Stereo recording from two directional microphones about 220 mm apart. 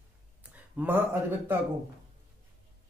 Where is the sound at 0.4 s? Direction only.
5° right (ahead or behind).